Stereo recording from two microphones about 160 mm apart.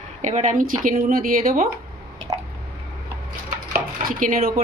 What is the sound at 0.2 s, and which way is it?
Speech, 50° right (ahead or behind).